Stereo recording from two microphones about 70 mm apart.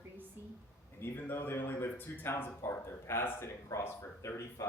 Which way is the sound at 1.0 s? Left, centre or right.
Left.